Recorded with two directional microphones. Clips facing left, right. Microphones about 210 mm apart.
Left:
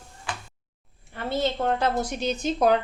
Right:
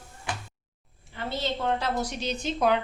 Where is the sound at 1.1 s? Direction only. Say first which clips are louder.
Left 5 dB; 50° left (ahead or behind).